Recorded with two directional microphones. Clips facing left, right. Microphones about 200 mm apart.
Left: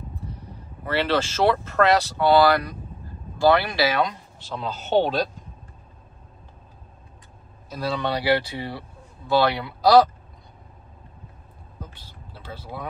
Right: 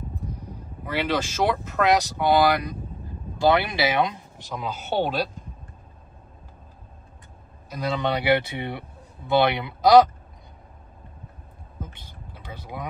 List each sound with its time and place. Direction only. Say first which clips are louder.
0.8 s speech: left 2 dB; 10° right (ahead or behind)
7.7 s speech: even; 20° right (ahead or behind)
11.8 s vehicle: right 2 dB; 20° right (ahead or behind)